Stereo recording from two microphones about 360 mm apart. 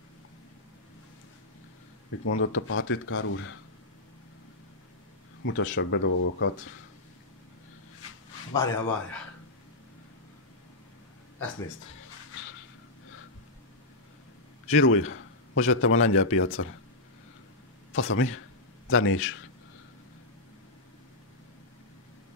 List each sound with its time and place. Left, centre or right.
2.2 s speech: left
5.4 s speech: left
8.5 s speech: centre
14.7 s a man's voice: left
17.9 s speech: left